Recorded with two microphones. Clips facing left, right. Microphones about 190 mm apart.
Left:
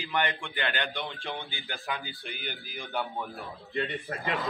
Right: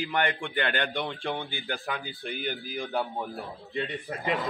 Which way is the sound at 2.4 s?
40° right (ahead or behind).